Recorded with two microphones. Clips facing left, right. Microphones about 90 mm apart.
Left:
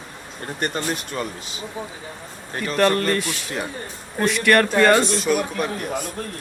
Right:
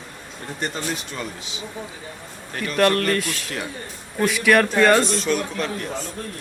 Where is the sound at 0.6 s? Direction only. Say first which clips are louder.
Left 2 dB; 55° left (ahead or behind).